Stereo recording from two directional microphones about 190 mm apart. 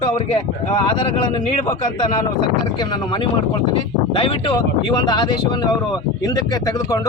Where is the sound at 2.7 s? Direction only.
25° left (ahead or behind).